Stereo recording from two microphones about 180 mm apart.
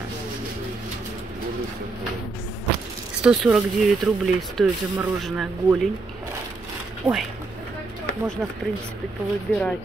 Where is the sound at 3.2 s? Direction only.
Centre (ahead or behind).